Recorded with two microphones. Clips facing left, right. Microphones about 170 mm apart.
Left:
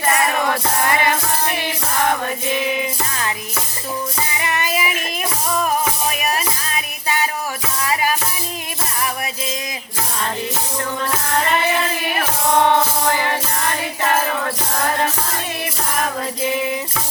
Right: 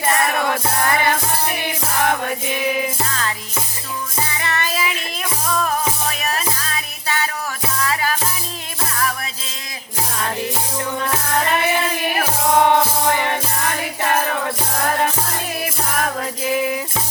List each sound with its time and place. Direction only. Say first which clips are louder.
2.6 s music: right 1 dB; centre (ahead or behind)
3.1 s music: even; 15° left (ahead or behind)
4.4 s music: left 2 dB; 15° left (ahead or behind)
6.1 s music: left 2 dB; 15° left (ahead or behind)
12.5 s music: right 1 dB; 10° right (ahead or behind)
16.5 s music: right 3 dB; centre (ahead or behind)